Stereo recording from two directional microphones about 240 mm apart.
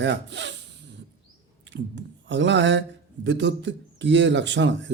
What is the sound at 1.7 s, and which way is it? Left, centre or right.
A man's voice, right.